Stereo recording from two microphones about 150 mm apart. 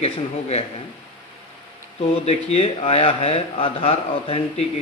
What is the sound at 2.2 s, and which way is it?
Speech, 45° left (ahead or behind).